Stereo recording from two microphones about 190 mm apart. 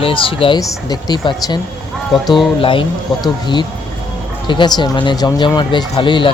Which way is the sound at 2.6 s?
30° left (ahead or behind).